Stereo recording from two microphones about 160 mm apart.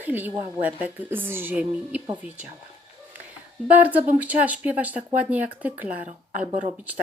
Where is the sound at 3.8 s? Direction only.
10° right (ahead or behind).